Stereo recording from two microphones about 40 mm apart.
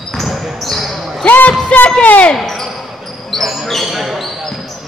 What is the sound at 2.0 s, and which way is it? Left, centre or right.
Speech, left.